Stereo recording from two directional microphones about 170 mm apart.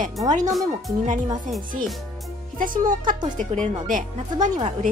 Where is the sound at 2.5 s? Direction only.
55° right (ahead or behind).